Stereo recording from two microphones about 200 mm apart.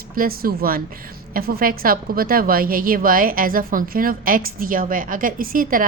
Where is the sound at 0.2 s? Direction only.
45° right (ahead or behind).